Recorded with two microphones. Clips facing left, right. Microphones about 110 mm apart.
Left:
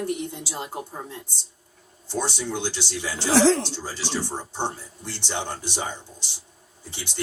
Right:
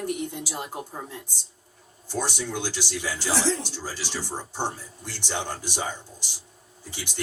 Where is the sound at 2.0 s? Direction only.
20° left (ahead or behind).